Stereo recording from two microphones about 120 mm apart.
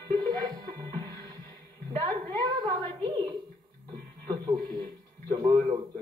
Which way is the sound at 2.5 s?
40° right (ahead or behind).